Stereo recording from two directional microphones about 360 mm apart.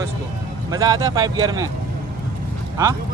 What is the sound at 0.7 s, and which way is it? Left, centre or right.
Speech, centre.